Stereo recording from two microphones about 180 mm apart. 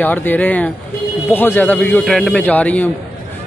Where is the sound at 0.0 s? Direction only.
10° left (ahead or behind).